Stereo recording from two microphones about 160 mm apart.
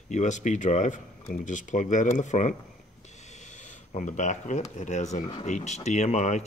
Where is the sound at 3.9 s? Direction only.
50° left (ahead or behind).